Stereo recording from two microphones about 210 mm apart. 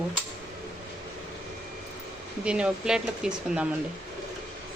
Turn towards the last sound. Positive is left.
turn(degrees=-5)  # may be behind; listen again after turning